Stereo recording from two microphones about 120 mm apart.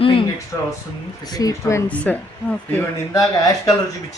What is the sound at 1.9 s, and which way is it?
Speech, 10° left (ahead or behind).